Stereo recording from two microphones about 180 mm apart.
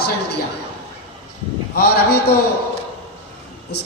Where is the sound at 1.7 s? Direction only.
65° left (ahead or behind).